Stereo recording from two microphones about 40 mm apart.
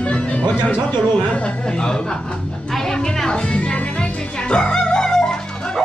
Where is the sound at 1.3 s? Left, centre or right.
Left.